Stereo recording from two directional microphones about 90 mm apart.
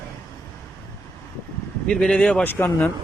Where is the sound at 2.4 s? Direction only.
20° left (ahead or behind).